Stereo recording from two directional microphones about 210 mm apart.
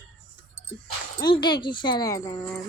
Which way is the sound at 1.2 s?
20° left (ahead or behind).